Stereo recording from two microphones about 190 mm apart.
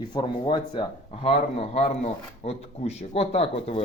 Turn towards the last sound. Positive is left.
turn(degrees=30)  # may be behind; listen again after turning